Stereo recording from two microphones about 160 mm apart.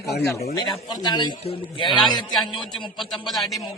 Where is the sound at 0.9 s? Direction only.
25° left (ahead or behind).